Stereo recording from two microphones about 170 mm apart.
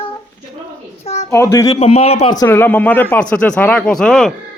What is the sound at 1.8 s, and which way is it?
Speech, 35° left (ahead or behind).